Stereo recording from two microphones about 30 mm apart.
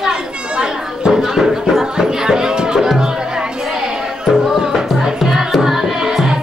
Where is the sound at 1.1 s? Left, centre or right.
Centre.